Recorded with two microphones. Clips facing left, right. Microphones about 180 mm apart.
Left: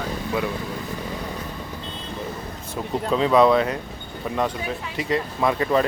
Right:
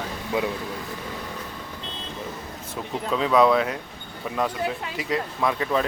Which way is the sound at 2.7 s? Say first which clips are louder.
Left 4 dB; centre (ahead or behind).